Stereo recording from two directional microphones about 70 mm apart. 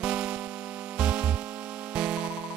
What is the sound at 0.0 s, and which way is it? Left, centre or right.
Music, centre.